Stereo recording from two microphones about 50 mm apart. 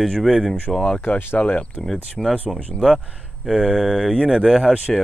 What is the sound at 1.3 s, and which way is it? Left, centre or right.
Speech, left.